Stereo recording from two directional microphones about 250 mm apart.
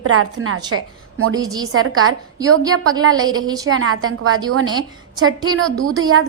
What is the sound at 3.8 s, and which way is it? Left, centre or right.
Speech, right.